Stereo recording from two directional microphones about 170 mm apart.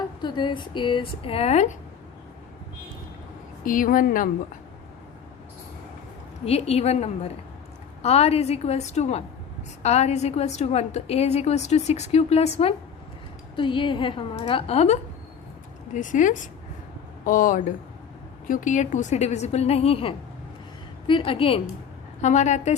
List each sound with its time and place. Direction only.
0.2 s speech: 25° left (ahead or behind)
3.6 s a woman's voice: 55° left (ahead or behind)
6.4 s a woman's voice: 35° left (ahead or behind)
15.9 s a woman's voice: 50° left (ahead or behind); by 21.6 s 30° left (ahead or behind)
22.2 s a woman's voice: 45° left (ahead or behind)